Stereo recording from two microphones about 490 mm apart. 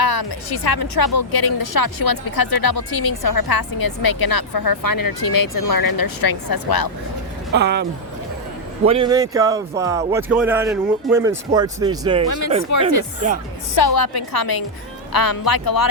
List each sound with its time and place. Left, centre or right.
0.0 s speech: left
7.5 s speech: centre
13.7 s speech: left